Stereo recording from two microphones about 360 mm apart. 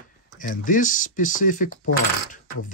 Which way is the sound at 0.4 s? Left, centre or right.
Left.